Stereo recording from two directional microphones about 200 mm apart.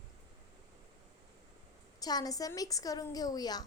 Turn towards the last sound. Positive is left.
turn(degrees=20)  # may be behind; listen again after turning